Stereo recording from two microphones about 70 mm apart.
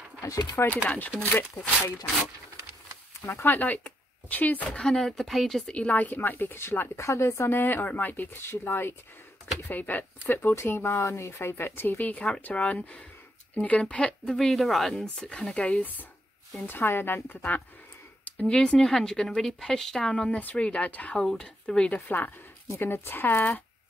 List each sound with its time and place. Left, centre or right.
0.8 s speech: left
3.3 s speech: left
4.8 s speech: centre
5.7 s speech: centre
14.3 s speech: centre
15.1 s speech: centre
16.6 s speech: left
18.4 s speech: centre
21.2 s speech: centre
21.9 s speech: left